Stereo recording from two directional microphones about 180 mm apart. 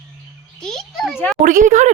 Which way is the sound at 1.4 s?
45° right (ahead or behind).